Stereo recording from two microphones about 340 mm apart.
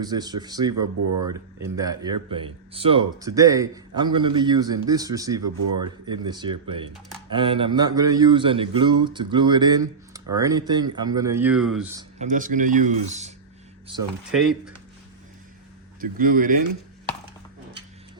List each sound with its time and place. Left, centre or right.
0.0 s a man's voice: centre
0.8 s speech: right
1.3 s a man's voice: centre
11.9 s speech: right
14.3 s speech: centre
16.0 s speech: right